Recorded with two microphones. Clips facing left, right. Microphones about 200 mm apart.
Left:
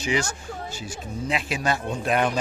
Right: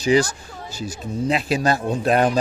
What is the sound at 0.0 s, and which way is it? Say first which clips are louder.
Speech: right 8 dB; 35° right (ahead or behind).